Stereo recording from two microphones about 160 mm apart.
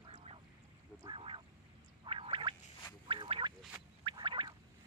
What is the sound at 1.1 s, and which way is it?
Duck, 30° right (ahead or behind).